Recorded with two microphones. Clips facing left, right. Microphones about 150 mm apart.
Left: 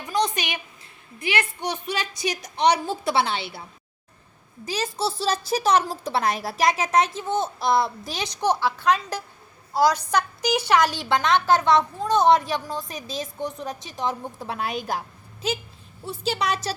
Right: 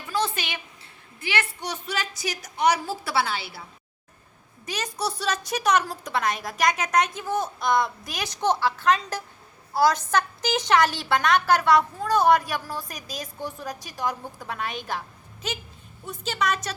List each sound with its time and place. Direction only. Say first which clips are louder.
0.0 s a sound: left 3 dB; 15° left (ahead or behind)
1.2 s a woman's voice: left 3 dB; 15° left (ahead or behind)
4.6 s a woman's voice: left 3 dB; 30° left (ahead or behind)
8.4 s a woman's voice: even; 15° left (ahead or behind); by 16.7 s 35° left (ahead or behind)